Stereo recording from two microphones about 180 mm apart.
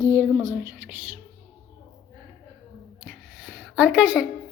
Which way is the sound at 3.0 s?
5° right (ahead or behind).